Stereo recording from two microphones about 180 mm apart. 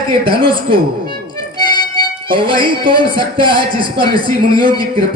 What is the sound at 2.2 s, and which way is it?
A man's voice, 30° right (ahead or behind).